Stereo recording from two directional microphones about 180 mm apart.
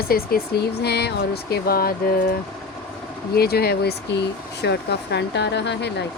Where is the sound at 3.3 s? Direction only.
60° left (ahead or behind).